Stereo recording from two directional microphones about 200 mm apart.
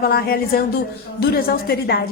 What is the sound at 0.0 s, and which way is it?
A woman's voice, 50° left (ahead or behind).